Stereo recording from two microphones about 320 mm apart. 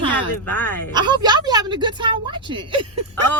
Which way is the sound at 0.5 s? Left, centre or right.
Centre.